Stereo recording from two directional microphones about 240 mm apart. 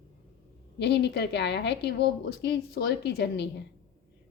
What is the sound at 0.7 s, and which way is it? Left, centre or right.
A woman's voice, left.